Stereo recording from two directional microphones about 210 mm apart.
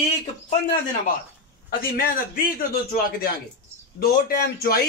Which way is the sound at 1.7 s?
45° left (ahead or behind).